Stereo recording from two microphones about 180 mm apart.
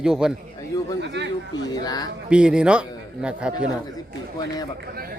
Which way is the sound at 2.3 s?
5° right (ahead or behind).